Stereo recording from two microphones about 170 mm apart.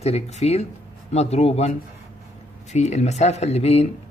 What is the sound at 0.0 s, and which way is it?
Speech, 40° left (ahead or behind).